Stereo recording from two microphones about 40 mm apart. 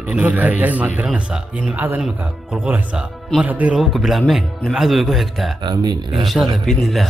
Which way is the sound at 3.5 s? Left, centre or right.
Right.